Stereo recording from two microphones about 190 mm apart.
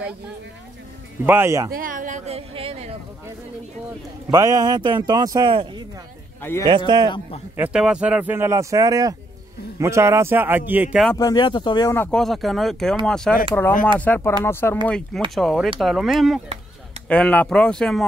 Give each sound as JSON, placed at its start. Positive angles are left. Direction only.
{"t": 1.2, "sound": "speech", "side_deg": -10}
{"t": 1.7, "sound": "speech", "side_deg": -45}
{"t": 4.3, "sound": "speech", "side_deg": -20}
{"t": 6.9, "sound": "speech", "side_deg": -25}
{"t": 7.5, "sound": "speech", "side_deg": -5}
{"t": 11.1, "sound": "speech", "side_deg": 20}
{"t": 11.9, "sound": "speech", "side_deg": 10}